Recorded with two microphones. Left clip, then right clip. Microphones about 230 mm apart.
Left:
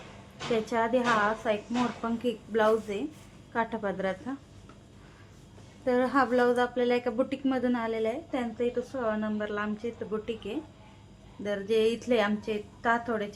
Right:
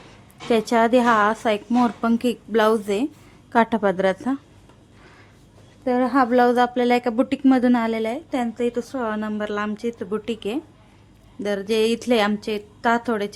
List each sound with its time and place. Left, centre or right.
0.5 s speech: right
5.8 s speech: right